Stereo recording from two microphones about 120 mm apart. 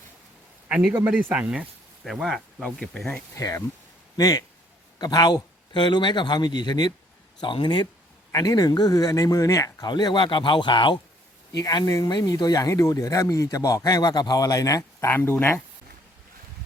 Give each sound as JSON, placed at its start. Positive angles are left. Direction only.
{"t": 0.7, "sound": "a man's voice", "side_deg": -5}
{"t": 3.3, "sound": "a man's voice", "side_deg": 25}
{"t": 9.9, "sound": "speech", "side_deg": 40}